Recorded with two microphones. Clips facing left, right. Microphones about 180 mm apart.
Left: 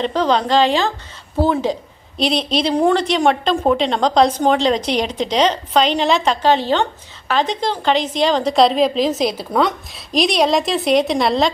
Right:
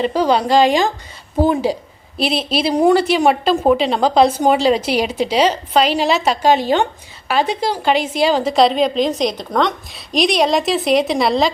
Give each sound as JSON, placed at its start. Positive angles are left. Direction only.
{"t": 0.0, "sound": "a woman's voice", "side_deg": -10}